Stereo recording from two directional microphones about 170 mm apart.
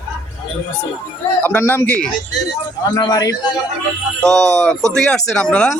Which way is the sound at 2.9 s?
25° left (ahead or behind).